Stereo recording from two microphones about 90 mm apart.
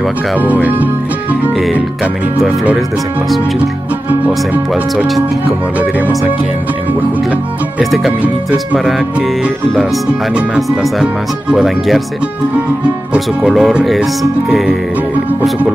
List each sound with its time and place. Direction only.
0.4 s speech: 20° right (ahead or behind)
2.4 s speech: 10° right (ahead or behind)
5.8 s speech: 15° right (ahead or behind)
7.8 s speech: centre (ahead or behind)
10.8 s speech: 5° right (ahead or behind)
13.1 s speech: 5° right (ahead or behind)